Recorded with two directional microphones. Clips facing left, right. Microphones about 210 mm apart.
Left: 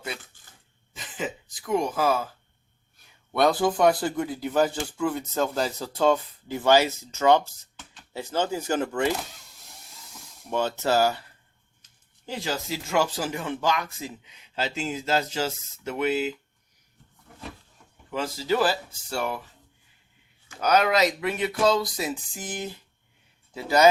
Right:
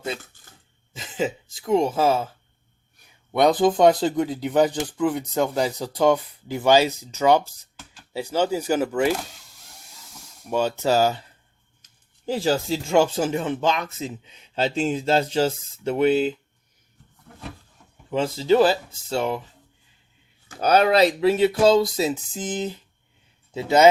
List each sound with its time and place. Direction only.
0.9 s speech: 25° right (ahead or behind)
3.3 s speech: 20° right (ahead or behind)
10.5 s speech: 10° right (ahead or behind)
12.2 s speech: 35° right (ahead or behind)
18.1 s speech: 25° right (ahead or behind)
20.6 s speech: 30° right (ahead or behind)